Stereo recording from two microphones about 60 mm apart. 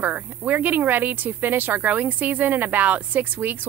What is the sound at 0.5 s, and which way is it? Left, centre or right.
A woman's voice, right.